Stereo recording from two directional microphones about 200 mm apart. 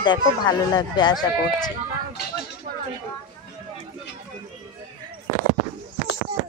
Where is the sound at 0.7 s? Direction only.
20° left (ahead or behind).